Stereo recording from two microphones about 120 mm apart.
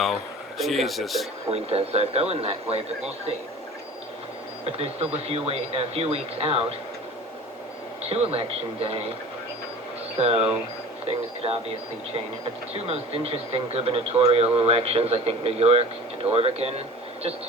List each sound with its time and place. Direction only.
0.6 s speech: centre (ahead or behind)
1.5 s speech: 55° right (ahead or behind)
4.6 s speech: 55° right (ahead or behind)
8.1 s speech: 55° right (ahead or behind)
10.2 s speech: 55° right (ahead or behind)
12.7 s speech: 55° right (ahead or behind)